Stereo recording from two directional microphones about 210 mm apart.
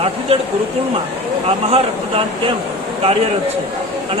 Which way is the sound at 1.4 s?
25° right (ahead or behind).